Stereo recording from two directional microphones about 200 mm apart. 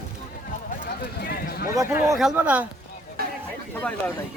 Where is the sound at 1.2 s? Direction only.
50° left (ahead or behind).